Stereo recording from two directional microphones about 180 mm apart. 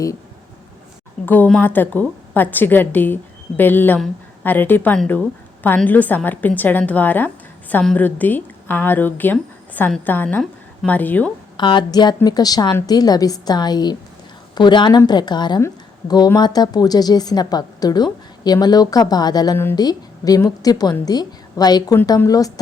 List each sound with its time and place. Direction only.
1.2 s a woman's voice: 10° left (ahead or behind)
11.5 s a woman's voice: 25° left (ahead or behind)